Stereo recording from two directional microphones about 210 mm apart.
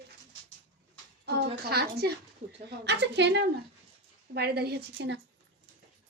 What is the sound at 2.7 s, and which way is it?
A woman's voice, 55° right (ahead or behind).